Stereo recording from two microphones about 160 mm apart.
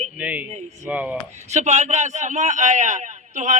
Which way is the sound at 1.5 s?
45° right (ahead or behind).